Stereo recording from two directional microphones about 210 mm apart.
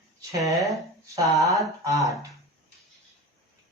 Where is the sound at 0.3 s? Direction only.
Centre (ahead or behind).